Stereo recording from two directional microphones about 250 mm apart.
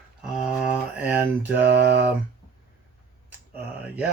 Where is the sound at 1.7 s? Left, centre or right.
Right.